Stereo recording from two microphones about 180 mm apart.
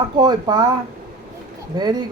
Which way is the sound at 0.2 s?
25° right (ahead or behind).